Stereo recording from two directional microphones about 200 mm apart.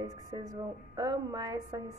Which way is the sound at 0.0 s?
20° right (ahead or behind).